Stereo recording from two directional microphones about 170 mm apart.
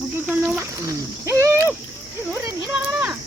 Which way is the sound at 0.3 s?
5° right (ahead or behind).